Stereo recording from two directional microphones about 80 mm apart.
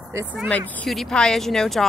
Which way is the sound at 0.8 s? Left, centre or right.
Centre.